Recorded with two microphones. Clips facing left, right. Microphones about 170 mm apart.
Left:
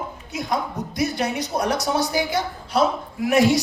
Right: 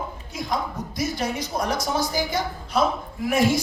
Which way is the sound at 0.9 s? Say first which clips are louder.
Left 3 dB; 65° left (ahead or behind).